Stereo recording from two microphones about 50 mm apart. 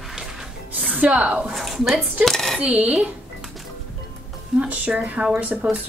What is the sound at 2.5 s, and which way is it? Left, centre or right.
Speech, right.